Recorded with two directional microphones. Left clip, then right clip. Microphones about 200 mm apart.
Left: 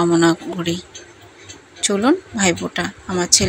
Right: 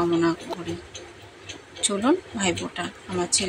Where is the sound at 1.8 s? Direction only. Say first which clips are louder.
Left 6 dB; 25° left (ahead or behind).